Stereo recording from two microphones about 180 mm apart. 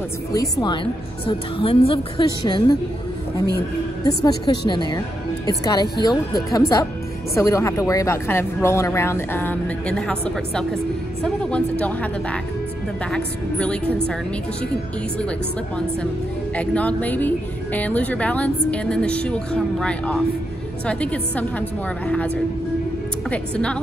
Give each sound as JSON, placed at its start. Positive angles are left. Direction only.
{"t": 0.3, "sound": "a woman's voice", "side_deg": 20}
{"t": 1.2, "sound": "a woman's voice", "side_deg": 30}
{"t": 4.0, "sound": "a woman's voice", "side_deg": 20}
{"t": 16.5, "sound": "a woman's voice", "side_deg": 5}